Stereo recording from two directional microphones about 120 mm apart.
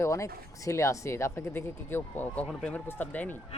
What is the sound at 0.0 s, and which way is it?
Speech, 25° left (ahead or behind).